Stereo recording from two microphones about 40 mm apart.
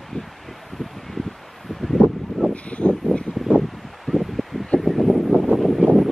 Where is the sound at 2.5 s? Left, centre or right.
Left.